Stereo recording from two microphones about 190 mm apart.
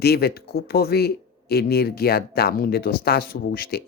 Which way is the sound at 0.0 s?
55° left (ahead or behind).